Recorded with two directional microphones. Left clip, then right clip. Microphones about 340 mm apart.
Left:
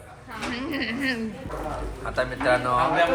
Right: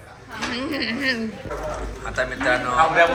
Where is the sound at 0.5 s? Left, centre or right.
Centre.